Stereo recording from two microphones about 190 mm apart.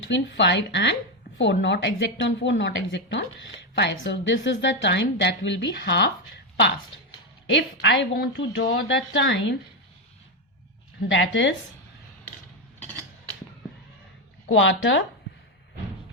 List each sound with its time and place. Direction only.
0.0 s a woman's voice: 70° left (ahead or behind)
7.5 s a woman's voice: 70° left (ahead or behind)
11.1 s a woman's voice: 70° left (ahead or behind)
14.4 s speech: 80° left